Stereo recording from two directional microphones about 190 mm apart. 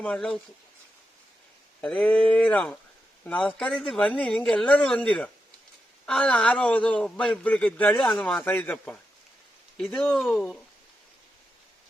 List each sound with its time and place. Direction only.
0.0 s speech: 5° left (ahead or behind)
1.8 s a man's voice: 5° left (ahead or behind)